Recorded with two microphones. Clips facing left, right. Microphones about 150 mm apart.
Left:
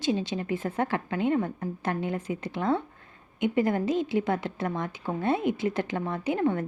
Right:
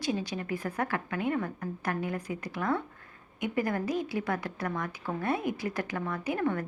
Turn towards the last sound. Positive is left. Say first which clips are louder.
# left 4 dB
turn(degrees=25)  # may be behind; listen again after turning